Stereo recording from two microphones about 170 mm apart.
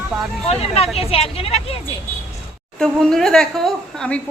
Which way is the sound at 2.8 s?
Centre (ahead or behind).